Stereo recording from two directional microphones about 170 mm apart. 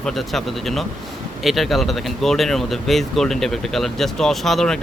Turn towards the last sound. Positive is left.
turn(degrees=0)  # may be behind; listen again after turning